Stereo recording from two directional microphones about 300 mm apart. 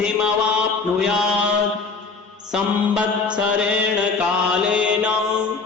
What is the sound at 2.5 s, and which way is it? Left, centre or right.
Mantra, centre.